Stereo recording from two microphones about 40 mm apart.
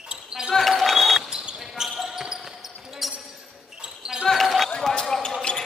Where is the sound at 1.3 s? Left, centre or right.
Centre.